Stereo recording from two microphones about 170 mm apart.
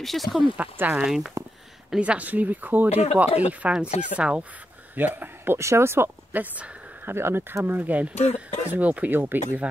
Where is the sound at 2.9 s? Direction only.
40° left (ahead or behind).